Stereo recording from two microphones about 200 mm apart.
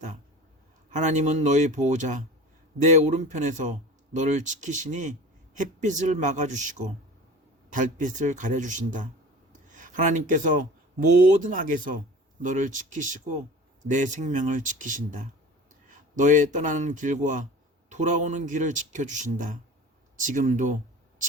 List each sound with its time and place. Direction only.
0.9 s speech: 35° right (ahead or behind)
9.5 s a sound: 40° right (ahead or behind)
11.4 s speech: 40° right (ahead or behind)